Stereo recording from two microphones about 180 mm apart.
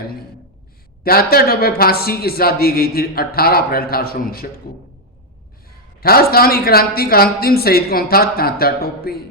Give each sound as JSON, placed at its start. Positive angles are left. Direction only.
{"t": 1.0, "sound": "a woman's voice", "side_deg": 55}
{"t": 5.6, "sound": "a woman's voice", "side_deg": 55}